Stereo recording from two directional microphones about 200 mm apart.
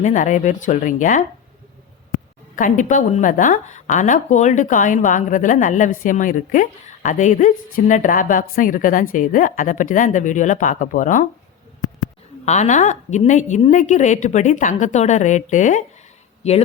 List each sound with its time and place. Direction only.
0.0 s speech: 40° left (ahead or behind)
12.5 s speech: 35° left (ahead or behind)